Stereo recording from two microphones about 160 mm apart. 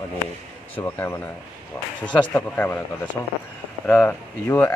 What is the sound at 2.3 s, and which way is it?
Speech, 15° left (ahead or behind).